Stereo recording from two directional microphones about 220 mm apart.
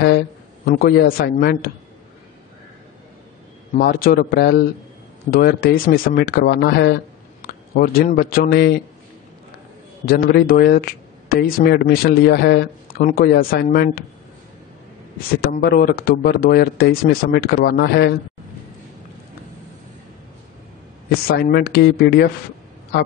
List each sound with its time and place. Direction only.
0.7 s speech: 45° left (ahead or behind)
3.7 s speech: 40° left (ahead or behind)
10.0 s speech: 45° left (ahead or behind)
15.4 s speech: 45° left (ahead or behind)
21.3 s speech: 45° left (ahead or behind)